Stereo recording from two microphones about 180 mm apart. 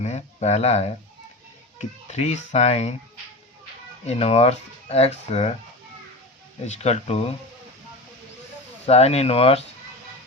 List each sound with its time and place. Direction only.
0.0 s speech: 40° left (ahead or behind)
2.0 s speech: 40° left (ahead or behind)
4.0 s speech: 35° left (ahead or behind)
6.7 s speech: 35° left (ahead or behind)
8.9 s speech: 35° left (ahead or behind)